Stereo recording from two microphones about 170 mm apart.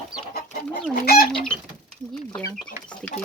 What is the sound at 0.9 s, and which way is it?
Speech, 65° left (ahead or behind).